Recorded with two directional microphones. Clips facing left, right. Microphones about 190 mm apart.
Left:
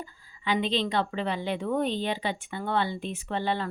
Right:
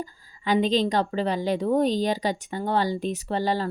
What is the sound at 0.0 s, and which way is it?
A woman's voice, 40° right (ahead or behind).